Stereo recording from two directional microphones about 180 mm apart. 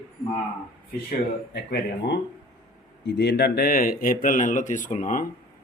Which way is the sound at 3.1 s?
70° left (ahead or behind).